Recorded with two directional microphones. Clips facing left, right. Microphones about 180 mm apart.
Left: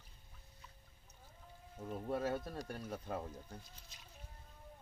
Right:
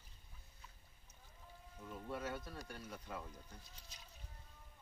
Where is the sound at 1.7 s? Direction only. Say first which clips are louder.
Left 7 dB; 40° left (ahead or behind).